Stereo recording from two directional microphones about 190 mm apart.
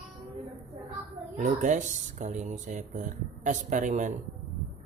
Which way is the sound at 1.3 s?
40° right (ahead or behind).